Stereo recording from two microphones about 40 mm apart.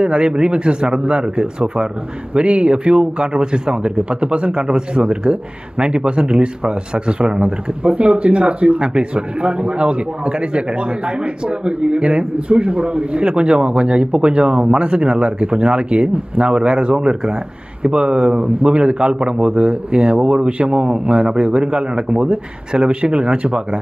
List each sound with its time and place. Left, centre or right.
0.0 s speech: right